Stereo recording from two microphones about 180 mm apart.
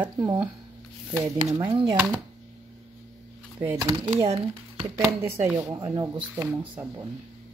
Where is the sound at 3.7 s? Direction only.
20° right (ahead or behind).